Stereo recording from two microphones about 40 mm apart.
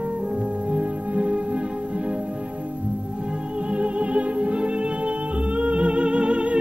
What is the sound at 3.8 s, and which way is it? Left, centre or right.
Music, right.